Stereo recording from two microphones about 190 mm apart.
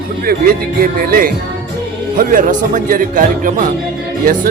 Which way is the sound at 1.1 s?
50° right (ahead or behind).